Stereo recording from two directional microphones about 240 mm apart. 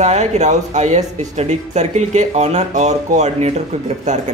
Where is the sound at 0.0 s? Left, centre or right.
Right.